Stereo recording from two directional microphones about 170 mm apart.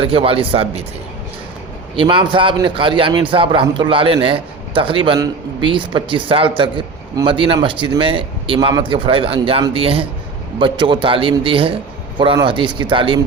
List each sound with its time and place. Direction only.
0.0 s a man's voice: 35° right (ahead or behind)
2.0 s a man's voice: 30° right (ahead or behind)